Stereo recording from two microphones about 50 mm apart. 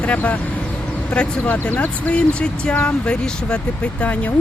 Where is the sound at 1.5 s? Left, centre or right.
Left.